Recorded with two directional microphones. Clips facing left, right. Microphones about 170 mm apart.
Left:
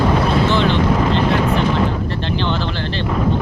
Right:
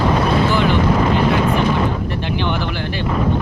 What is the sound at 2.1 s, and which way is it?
Speech, 15° right (ahead or behind).